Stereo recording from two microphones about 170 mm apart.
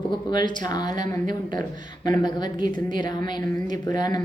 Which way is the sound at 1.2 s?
50° right (ahead or behind).